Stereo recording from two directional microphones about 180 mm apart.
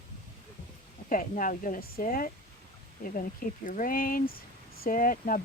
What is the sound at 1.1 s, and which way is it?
Speech, 50° left (ahead or behind).